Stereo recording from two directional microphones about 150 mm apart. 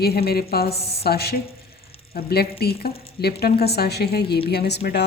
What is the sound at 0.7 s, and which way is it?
Speech, 40° left (ahead or behind).